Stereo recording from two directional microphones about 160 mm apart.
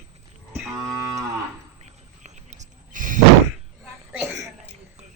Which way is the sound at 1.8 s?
45° right (ahead or behind).